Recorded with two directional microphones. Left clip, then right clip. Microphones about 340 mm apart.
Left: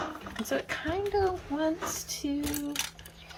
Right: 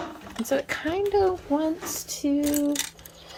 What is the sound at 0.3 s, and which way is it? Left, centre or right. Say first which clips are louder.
Speech: right 6 dB; right.